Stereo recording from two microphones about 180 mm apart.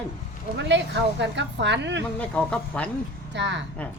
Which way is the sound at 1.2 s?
75° right (ahead or behind).